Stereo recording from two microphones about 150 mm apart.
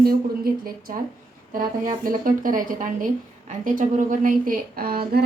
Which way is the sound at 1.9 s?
65° right (ahead or behind).